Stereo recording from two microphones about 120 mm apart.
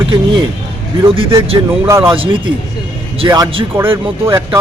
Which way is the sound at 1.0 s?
45° right (ahead or behind).